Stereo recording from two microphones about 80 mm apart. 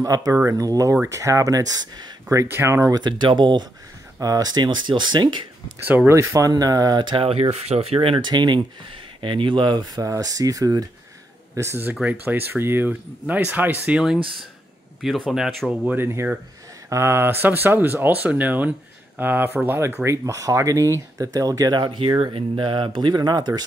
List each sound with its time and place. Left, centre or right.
0.0 s speech: right
2.3 s speech: right
2.9 s speech: right
4.2 s speech: right
6.0 s speech: right
7.0 s speech: right
11.5 s speech: right
11.9 s speech: centre
15.0 s speech: centre
16.0 s speech: right
20.2 s speech: right
21.8 s speech: right